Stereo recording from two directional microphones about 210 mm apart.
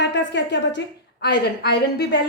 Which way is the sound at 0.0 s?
55° left (ahead or behind).